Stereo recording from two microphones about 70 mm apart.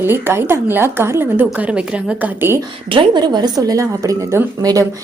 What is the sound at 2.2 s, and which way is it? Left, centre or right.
Speech, right.